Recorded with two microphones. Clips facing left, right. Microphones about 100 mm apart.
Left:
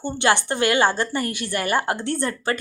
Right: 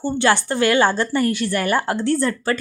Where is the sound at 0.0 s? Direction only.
20° left (ahead or behind).